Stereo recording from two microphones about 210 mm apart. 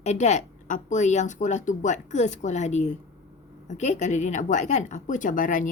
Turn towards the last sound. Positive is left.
turn(degrees=40)  # may be behind; listen again after turning